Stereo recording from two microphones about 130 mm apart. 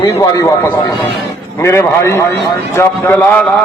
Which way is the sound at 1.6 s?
20° left (ahead or behind).